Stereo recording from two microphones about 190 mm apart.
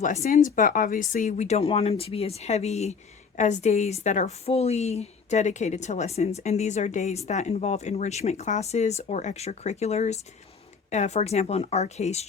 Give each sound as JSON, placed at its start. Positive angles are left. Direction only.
{"t": 0.0, "sound": "a woman's voice", "side_deg": 40}